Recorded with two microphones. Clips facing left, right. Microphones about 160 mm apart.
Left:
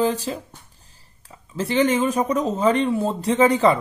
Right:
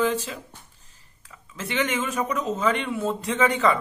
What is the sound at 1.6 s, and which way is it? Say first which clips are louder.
Speech: left 7 dB; 35° left (ahead or behind).